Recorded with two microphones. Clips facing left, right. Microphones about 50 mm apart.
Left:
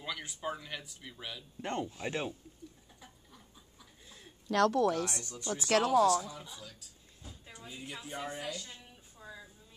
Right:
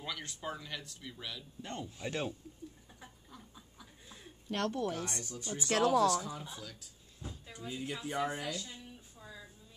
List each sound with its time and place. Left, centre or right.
0.0 s speech: centre
1.6 s speech: left
2.0 s speech: left
3.3 s a sound: right
4.5 s speech: left
5.2 s speech: left
5.9 s speech: centre
6.2 s speech: right
8.1 s speech: right
8.4 s speech: centre
9.2 s music: centre